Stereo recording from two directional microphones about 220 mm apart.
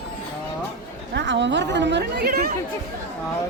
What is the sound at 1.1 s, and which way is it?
Speech, 55° right (ahead or behind).